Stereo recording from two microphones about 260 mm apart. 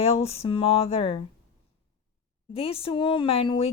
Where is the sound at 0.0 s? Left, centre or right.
Left.